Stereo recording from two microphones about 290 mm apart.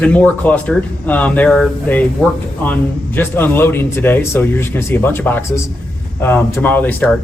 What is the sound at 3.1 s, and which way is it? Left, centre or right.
Speech, centre.